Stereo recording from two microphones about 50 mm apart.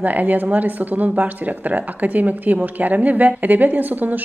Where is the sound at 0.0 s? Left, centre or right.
Right.